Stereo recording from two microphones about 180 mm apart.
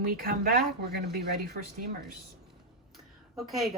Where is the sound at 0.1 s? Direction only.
55° right (ahead or behind).